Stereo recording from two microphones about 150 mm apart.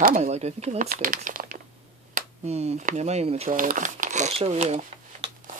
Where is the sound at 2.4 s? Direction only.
45° right (ahead or behind).